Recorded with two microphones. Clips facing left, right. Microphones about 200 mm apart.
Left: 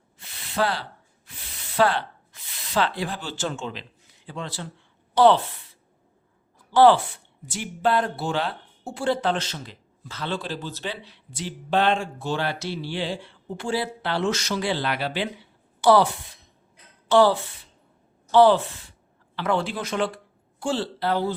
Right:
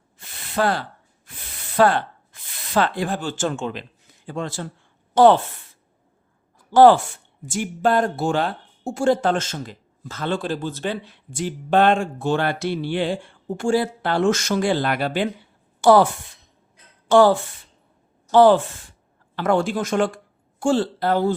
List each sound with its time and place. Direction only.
0.2 s a sound: 50° right (ahead or behind)
1.3 s spray: 50° right (ahead or behind)
2.6 s speech: 50° right (ahead or behind)
6.7 s speech: 45° right (ahead or behind)
17.1 s speech: 50° right (ahead or behind)